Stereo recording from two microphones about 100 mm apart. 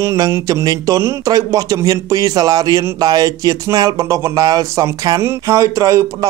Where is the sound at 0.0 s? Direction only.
30° right (ahead or behind).